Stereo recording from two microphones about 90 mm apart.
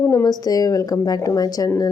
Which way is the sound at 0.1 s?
40° left (ahead or behind).